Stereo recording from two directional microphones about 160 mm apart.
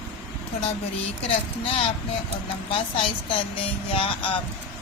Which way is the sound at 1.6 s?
35° left (ahead or behind).